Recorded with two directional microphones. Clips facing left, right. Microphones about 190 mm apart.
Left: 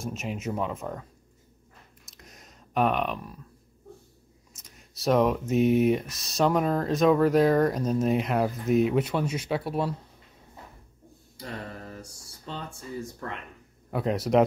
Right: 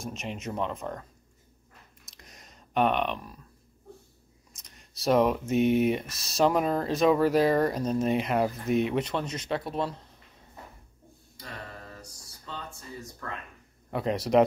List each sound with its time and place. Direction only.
0.0 s speech: 5° left (ahead or behind)
2.0 s a sound: centre (ahead or behind)
4.6 s speech: 5° left (ahead or behind)
11.9 s mantra: 25° left (ahead or behind)
13.8 s speech: centre (ahead or behind)